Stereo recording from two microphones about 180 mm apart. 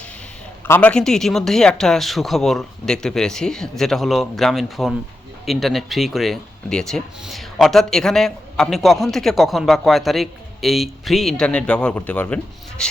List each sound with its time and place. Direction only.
0.6 s speech: 10° left (ahead or behind)